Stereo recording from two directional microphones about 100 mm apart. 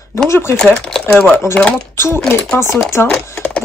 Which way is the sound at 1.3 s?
20° left (ahead or behind).